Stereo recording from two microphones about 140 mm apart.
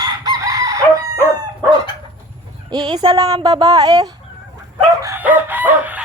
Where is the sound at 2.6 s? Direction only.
30° right (ahead or behind).